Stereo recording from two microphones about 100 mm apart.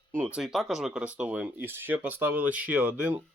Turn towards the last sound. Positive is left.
turn(degrees=-20)  # may be behind; listen again after turning